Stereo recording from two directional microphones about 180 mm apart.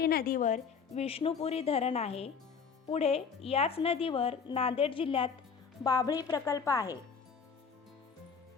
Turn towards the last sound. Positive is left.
turn(degrees=20)  # may be behind; listen again after turning